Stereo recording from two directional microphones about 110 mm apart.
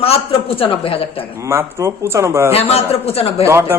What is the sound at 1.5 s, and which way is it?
Speech, 25° right (ahead or behind).